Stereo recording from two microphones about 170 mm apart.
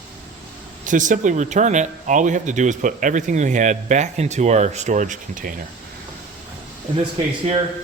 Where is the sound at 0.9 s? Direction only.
50° right (ahead or behind).